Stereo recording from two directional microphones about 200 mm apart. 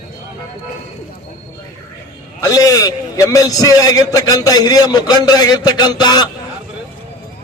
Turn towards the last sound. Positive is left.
turn(degrees=20)  # may be behind; listen again after turning